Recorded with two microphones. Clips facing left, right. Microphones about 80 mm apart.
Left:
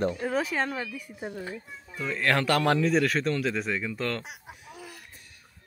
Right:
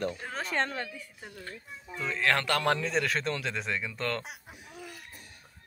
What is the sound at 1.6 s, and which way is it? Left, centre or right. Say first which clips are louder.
Speech: left 1 dB; centre.